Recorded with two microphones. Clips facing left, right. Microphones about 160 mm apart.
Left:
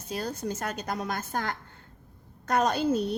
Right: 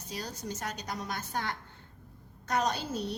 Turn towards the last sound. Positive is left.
turn(degrees=55)  # may be behind; listen again after turning